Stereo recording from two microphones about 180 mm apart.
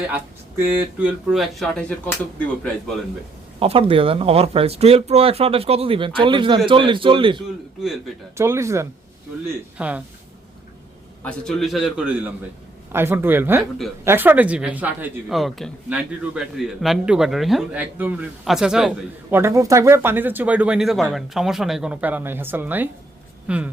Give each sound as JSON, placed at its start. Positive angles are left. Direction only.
{"t": 0.6, "sound": "speech", "side_deg": -10}
{"t": 3.6, "sound": "a man's voice", "side_deg": -30}
{"t": 8.4, "sound": "speech", "side_deg": -15}
{"t": 11.2, "sound": "speech", "side_deg": 5}
{"t": 13.6, "sound": "speech", "side_deg": 0}
{"t": 14.0, "sound": "speech", "side_deg": -10}
{"t": 19.4, "sound": "speech", "side_deg": -15}